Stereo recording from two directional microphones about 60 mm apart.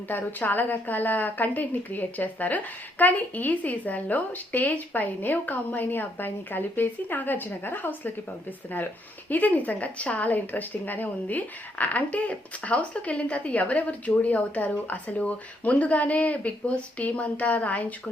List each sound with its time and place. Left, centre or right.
0.1 s a woman's voice: left
9.3 s a woman's voice: left